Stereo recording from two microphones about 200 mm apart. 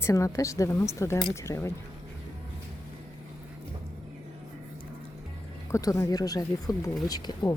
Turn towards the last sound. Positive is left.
turn(degrees=15)  # may be behind; listen again after turning